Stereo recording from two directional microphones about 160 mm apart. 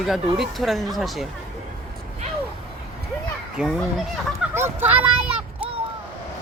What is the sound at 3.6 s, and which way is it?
Speech, 5° right (ahead or behind).